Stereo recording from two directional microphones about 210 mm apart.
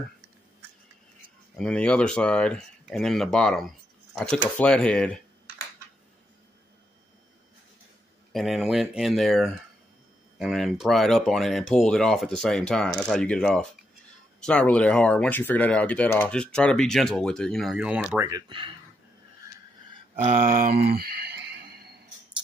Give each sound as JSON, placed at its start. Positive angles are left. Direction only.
{"t": 1.6, "sound": "speech", "side_deg": 5}
{"t": 8.3, "sound": "speech", "side_deg": 0}
{"t": 18.3, "sound": "speech", "side_deg": -25}
{"t": 20.2, "sound": "a sound", "side_deg": -40}